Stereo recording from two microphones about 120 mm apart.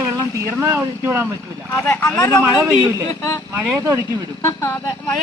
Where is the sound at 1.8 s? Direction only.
15° left (ahead or behind).